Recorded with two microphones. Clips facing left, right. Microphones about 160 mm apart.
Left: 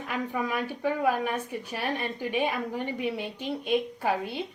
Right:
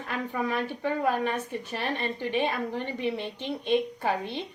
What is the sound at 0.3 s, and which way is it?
A woman's voice, 10° left (ahead or behind).